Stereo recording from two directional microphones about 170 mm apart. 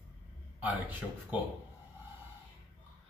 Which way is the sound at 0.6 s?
10° right (ahead or behind).